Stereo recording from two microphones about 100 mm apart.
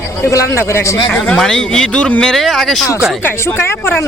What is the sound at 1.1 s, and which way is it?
Speech, 5° left (ahead or behind).